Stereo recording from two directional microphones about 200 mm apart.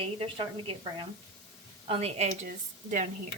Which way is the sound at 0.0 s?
25° right (ahead or behind).